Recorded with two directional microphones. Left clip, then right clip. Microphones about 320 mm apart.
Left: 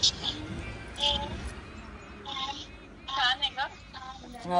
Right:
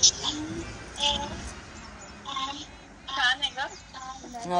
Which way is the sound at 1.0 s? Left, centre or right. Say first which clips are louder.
Right 1 dB; right.